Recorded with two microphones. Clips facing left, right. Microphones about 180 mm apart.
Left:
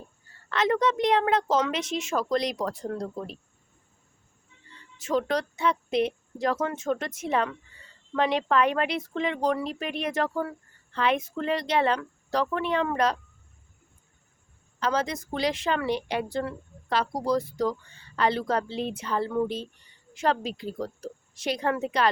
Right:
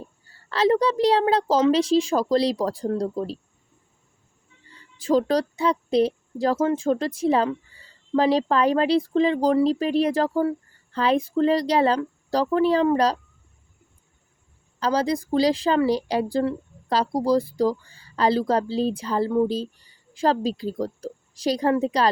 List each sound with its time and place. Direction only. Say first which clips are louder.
0.5 s a woman's voice: right 4 dB; 30° right (ahead or behind)
4.9 s a woman's voice: right 6 dB; 35° right (ahead or behind)
14.8 s a woman's voice: right 5 dB; 35° right (ahead or behind)